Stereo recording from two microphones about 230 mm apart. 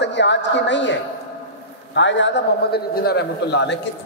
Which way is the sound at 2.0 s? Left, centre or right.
Left.